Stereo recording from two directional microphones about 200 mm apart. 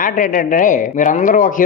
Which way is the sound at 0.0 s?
40° left (ahead or behind).